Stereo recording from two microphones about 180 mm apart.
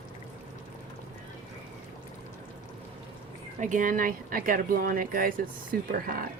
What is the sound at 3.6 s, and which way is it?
Speech, 45° right (ahead or behind).